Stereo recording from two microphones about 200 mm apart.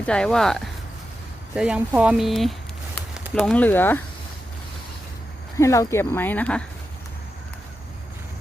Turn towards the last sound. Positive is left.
turn(degrees=5)  # may be behind; listen again after turning